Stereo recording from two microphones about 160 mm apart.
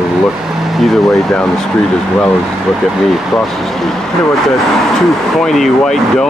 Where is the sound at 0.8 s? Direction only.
Centre (ahead or behind).